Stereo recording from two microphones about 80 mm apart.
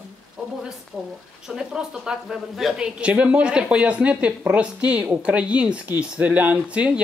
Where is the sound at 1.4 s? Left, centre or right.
Centre.